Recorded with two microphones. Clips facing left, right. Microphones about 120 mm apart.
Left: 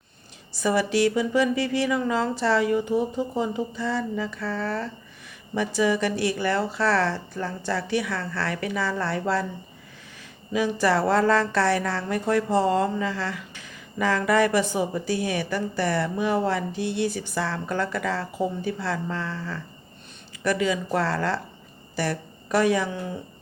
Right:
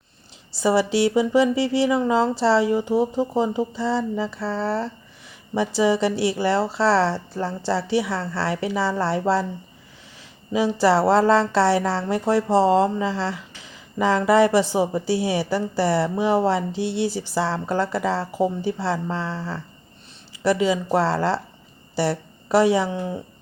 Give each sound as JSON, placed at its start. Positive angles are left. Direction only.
{"t": 0.5, "sound": "a woman's voice", "side_deg": -30}
{"t": 10.5, "sound": "a woman's voice", "side_deg": -25}